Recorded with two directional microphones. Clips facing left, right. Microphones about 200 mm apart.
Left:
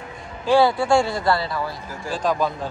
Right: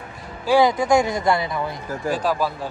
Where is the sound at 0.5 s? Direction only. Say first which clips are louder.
Even; 15° right (ahead or behind).